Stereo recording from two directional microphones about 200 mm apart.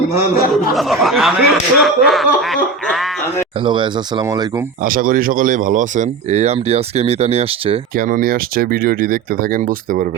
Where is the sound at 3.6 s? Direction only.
25° right (ahead or behind).